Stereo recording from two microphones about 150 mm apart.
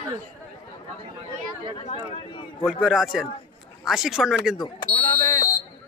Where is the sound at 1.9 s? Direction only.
35° left (ahead or behind).